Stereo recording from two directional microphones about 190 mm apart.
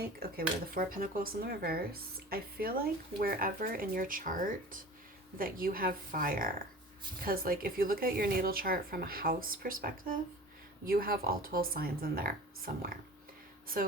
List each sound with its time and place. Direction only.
0.2 s speech: 50° right (ahead or behind)